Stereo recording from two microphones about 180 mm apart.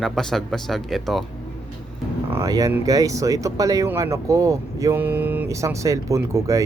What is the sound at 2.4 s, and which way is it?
Speech, 20° right (ahead or behind).